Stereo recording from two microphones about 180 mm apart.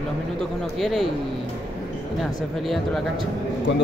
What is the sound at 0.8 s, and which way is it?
Speech, centre (ahead or behind).